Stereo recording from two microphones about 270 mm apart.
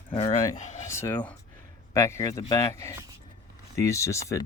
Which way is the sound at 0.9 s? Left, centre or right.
Centre.